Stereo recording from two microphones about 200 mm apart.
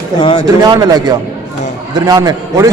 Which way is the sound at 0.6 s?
20° right (ahead or behind).